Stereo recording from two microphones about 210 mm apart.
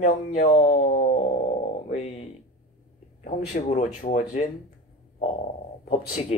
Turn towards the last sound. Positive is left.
turn(degrees=35)  # may be behind; listen again after turning